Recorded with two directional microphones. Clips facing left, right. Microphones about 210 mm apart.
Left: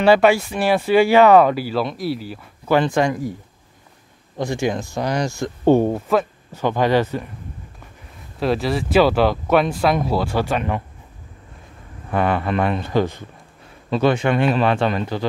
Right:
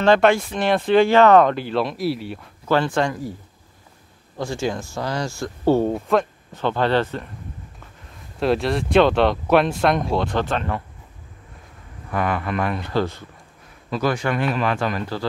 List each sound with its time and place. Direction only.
0.0 s speech: 10° left (ahead or behind)
2.6 s speech: 15° left (ahead or behind)
4.4 s speech: 15° left (ahead or behind)
5.9 s speech: 5° left (ahead or behind)
8.4 s speech: centre (ahead or behind)
12.1 s speech: 30° left (ahead or behind)